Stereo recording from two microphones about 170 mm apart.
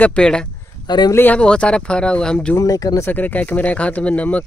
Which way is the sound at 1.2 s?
5° left (ahead or behind).